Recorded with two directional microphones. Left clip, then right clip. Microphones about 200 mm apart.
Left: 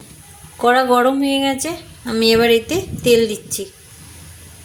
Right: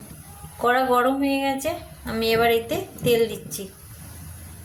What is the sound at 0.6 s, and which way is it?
Speech, 50° left (ahead or behind).